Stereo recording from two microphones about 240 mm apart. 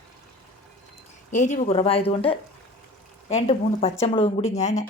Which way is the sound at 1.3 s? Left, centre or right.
Left.